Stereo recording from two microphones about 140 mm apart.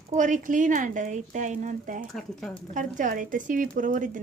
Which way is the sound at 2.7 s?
65° right (ahead or behind).